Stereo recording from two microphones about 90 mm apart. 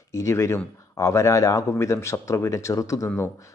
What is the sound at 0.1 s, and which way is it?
A man's voice, 35° left (ahead or behind).